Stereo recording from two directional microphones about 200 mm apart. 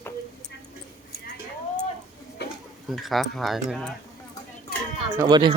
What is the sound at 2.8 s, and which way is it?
Speech, centre (ahead or behind).